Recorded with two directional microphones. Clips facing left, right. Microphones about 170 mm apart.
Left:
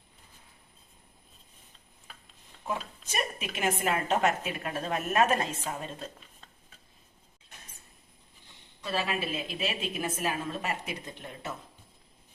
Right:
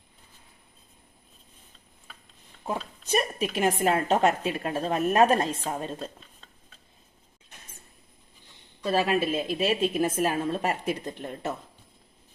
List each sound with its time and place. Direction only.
2.6 s a woman's voice: 35° right (ahead or behind)
8.8 s a woman's voice: 40° right (ahead or behind)